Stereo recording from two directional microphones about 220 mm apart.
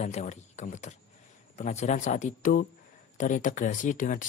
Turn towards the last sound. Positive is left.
turn(degrees=35)  # may be behind; listen again after turning